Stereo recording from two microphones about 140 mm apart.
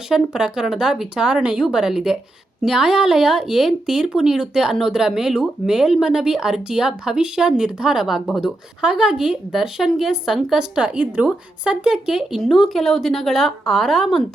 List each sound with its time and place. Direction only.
0.1 s speech: 5° right (ahead or behind)